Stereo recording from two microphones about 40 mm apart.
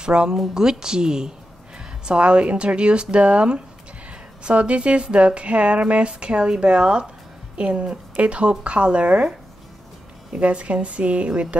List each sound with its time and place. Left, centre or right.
0.0 s speech: right
10.3 s a woman's voice: right